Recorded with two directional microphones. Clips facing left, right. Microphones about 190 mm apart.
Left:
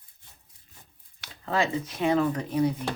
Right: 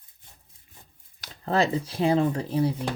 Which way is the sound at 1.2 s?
40° right (ahead or behind).